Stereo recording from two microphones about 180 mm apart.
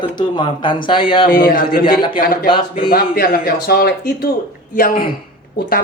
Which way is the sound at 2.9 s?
55° left (ahead or behind).